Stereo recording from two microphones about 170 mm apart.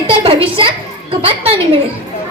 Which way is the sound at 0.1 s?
30° right (ahead or behind).